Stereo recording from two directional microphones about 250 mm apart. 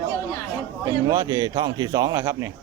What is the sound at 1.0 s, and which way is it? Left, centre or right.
A man's voice, centre.